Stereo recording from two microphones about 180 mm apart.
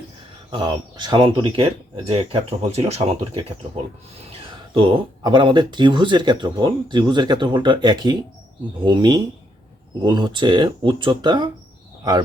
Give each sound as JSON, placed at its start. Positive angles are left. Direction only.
{"t": 0.5, "sound": "speech", "side_deg": -25}